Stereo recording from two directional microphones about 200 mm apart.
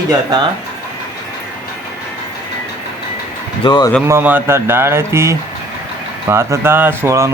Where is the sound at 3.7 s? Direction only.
20° left (ahead or behind).